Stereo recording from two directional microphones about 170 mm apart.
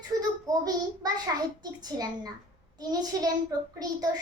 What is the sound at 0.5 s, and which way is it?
Speech, 20° right (ahead or behind).